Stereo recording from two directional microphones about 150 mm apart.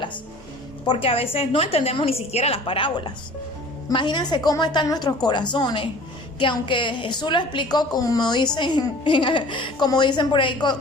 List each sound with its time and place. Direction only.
0.9 s a woman's voice: 40° left (ahead or behind)